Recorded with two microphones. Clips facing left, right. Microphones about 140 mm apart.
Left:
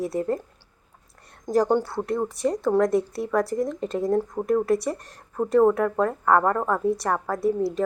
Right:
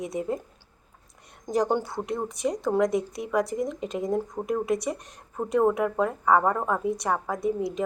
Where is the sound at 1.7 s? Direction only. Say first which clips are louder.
Left 4 dB; 20° right (ahead or behind).